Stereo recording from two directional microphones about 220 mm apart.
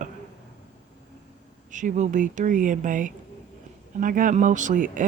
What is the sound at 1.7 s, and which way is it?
Speech, 35° right (ahead or behind).